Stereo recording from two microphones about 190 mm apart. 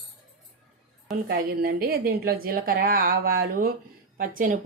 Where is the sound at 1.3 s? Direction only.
50° right (ahead or behind).